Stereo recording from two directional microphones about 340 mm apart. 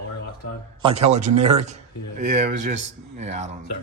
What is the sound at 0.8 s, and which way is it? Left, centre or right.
A man's voice, centre.